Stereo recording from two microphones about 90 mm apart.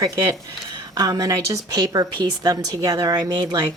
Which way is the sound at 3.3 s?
50° right (ahead or behind).